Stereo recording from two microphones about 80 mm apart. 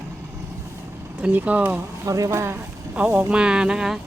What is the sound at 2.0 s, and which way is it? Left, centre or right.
Speech, right.